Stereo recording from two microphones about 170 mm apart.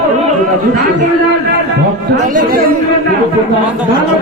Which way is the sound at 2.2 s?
55° right (ahead or behind).